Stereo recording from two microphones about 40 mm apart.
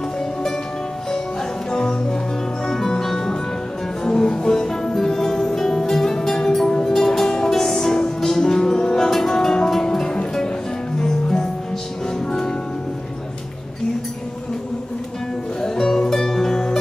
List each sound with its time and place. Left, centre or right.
1.7 s music: centre
15.6 s music: centre